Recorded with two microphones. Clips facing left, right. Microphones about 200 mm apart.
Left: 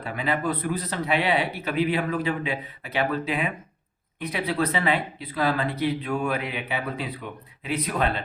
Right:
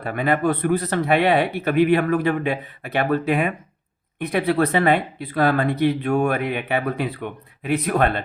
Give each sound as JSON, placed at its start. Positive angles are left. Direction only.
{"t": 0.0, "sound": "speech", "side_deg": -55}